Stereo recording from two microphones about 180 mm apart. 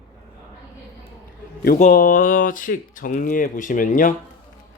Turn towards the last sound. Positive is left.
turn(degrees=50)  # may be behind; listen again after turning